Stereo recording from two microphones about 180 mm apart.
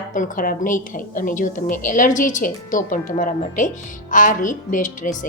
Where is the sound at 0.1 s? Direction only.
45° left (ahead or behind).